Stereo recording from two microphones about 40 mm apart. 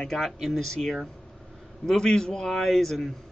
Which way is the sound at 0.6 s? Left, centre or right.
Centre.